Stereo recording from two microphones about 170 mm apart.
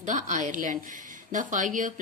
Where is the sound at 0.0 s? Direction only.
50° right (ahead or behind).